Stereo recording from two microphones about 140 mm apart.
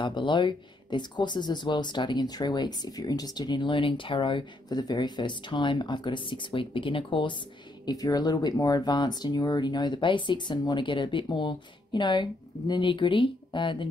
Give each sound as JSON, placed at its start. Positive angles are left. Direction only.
{"t": 0.0, "sound": "speech", "side_deg": 35}
{"t": 7.8, "sound": "speech", "side_deg": 25}